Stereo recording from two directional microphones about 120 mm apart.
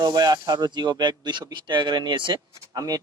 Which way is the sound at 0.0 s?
35° right (ahead or behind).